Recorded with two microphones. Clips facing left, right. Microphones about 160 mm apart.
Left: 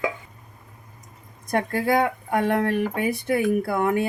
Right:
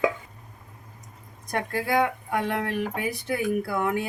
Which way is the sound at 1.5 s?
50° left (ahead or behind).